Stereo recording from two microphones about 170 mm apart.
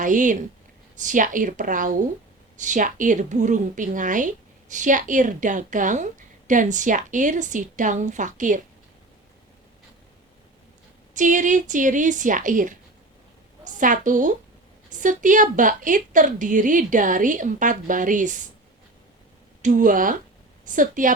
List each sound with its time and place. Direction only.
0.0 s a woman's voice: 50° right (ahead or behind)
11.1 s a woman's voice: 50° right (ahead or behind)
19.6 s a woman's voice: 50° right (ahead or behind)